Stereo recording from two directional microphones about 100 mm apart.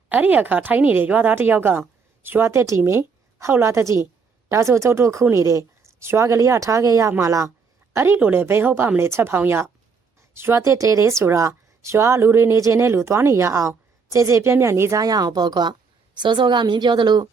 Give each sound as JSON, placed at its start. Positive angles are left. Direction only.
{"t": 0.1, "sound": "a woman's voice", "side_deg": -15}